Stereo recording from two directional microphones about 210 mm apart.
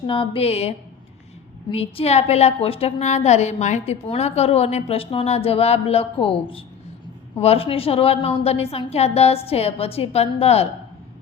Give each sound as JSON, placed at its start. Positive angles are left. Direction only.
{"t": 0.1, "sound": "a woman's voice", "side_deg": 25}
{"t": 1.7, "sound": "a woman's voice", "side_deg": 30}